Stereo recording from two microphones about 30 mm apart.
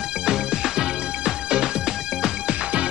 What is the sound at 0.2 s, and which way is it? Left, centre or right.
Music, right.